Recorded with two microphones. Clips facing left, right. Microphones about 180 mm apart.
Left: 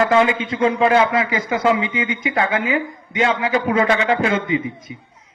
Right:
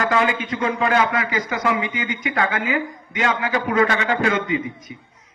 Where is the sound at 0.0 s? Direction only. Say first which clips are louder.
Left 4 dB; 25° left (ahead or behind).